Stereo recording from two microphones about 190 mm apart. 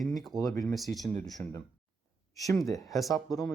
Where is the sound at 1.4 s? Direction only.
15° left (ahead or behind).